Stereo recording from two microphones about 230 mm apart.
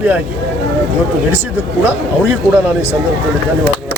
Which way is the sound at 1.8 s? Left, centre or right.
Centre.